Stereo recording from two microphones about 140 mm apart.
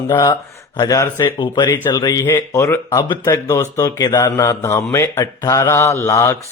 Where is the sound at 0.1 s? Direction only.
30° left (ahead or behind).